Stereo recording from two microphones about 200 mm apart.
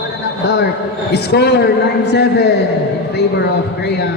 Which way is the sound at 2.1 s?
55° left (ahead or behind).